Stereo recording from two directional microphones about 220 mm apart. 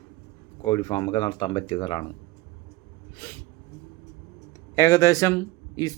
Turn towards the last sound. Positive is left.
turn(degrees=15)  # may be behind; listen again after turning